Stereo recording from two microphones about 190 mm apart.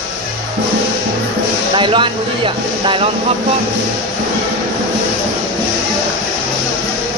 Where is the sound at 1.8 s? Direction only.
25° right (ahead or behind).